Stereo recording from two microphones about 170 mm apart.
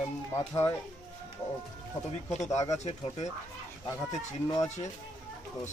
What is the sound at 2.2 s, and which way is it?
Speech, 40° left (ahead or behind).